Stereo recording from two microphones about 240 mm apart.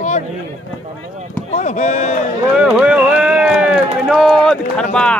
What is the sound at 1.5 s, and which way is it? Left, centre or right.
Speech, left.